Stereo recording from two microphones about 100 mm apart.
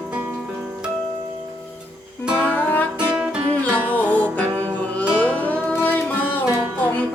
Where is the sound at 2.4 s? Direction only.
15° left (ahead or behind).